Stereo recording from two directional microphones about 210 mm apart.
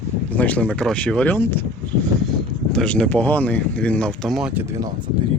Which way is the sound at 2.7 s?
5° left (ahead or behind).